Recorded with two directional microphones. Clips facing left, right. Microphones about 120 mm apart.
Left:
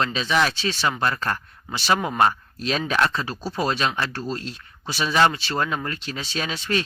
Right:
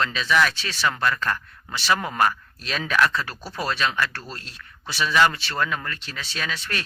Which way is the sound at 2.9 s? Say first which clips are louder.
Right 4 dB; 30° left (ahead or behind).